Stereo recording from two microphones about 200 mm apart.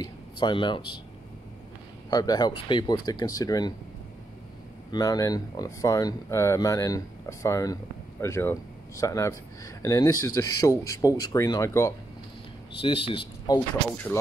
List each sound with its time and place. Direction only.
0.0 s speech: 25° left (ahead or behind)
2.0 s speech: 20° left (ahead or behind)
4.9 s speech: 20° left (ahead or behind)
12.8 s speech: 25° left (ahead or behind)